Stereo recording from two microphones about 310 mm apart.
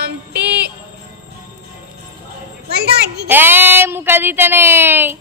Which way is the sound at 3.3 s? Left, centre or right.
Centre.